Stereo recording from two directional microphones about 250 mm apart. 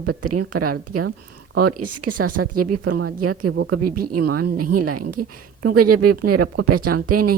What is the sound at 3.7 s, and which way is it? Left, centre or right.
Speech, right.